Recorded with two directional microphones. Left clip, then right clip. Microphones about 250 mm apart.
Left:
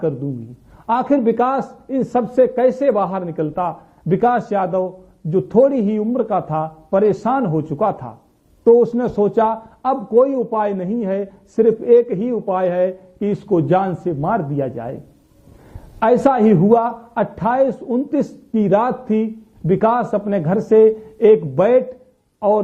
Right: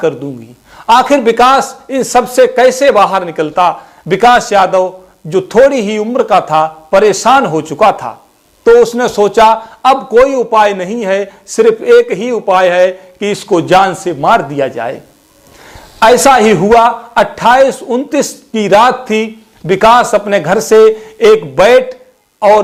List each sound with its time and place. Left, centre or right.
0.8 s speech: centre
7.8 s speech: centre
8.8 s speech: centre
9.9 s a man's voice: right
10.3 s speech: centre
19.9 s a man's voice: right
20.1 s speech: centre